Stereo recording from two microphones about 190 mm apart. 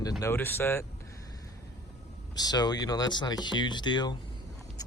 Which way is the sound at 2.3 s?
20° left (ahead or behind).